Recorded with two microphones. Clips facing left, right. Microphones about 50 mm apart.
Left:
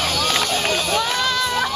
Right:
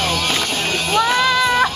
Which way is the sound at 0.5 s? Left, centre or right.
Right.